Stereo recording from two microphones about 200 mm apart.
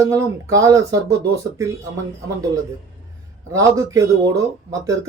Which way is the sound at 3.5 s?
15° right (ahead or behind).